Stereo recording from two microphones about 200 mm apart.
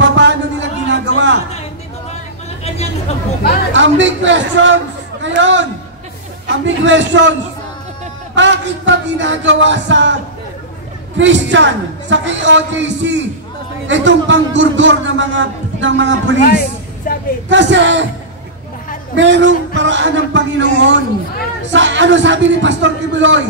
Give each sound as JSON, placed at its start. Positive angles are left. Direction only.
{"t": 0.0, "sound": "a sound", "side_deg": -65}
{"t": 3.7, "sound": "a man's voice", "side_deg": -65}
{"t": 8.4, "sound": "a man's voice", "side_deg": -65}
{"t": 11.1, "sound": "a man's voice", "side_deg": -65}
{"t": 16.3, "sound": "speech", "side_deg": 45}
{"t": 17.1, "sound": "a sound", "side_deg": 45}
{"t": 17.5, "sound": "a man's voice", "side_deg": -65}
{"t": 19.1, "sound": "a man's voice", "side_deg": -65}
{"t": 21.7, "sound": "a man's voice", "side_deg": -65}